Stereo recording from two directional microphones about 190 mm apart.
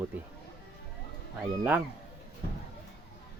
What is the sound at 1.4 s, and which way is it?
Speech, 10° right (ahead or behind).